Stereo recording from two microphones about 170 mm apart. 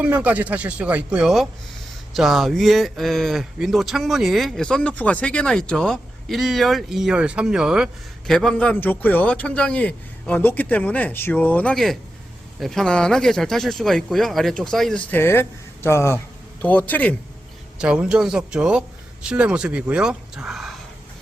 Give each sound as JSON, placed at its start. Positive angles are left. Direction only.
{"t": 0.0, "sound": "a man's voice", "side_deg": -10}
{"t": 17.7, "sound": "speech", "side_deg": -5}